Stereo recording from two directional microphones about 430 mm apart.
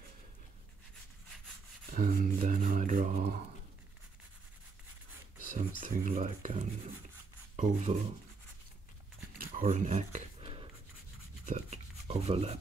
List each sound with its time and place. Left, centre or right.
1.9 s speech: centre
5.5 s speech: centre
9.4 s a sound: centre
11.4 s speech: centre